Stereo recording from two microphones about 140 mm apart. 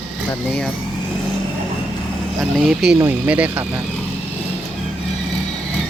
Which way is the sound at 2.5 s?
5° right (ahead or behind).